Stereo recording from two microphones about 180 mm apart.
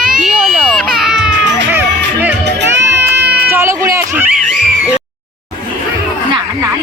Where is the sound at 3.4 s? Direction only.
15° right (ahead or behind).